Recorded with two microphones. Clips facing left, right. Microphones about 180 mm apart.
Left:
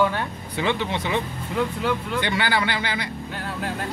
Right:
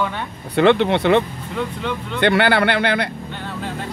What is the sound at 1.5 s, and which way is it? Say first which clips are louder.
Speech: left 1 dB; 5° left (ahead or behind).